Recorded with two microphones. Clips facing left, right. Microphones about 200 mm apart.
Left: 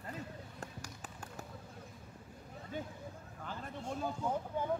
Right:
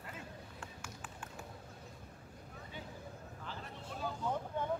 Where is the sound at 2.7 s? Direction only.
45° left (ahead or behind).